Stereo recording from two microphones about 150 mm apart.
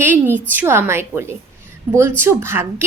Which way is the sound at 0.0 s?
15° right (ahead or behind).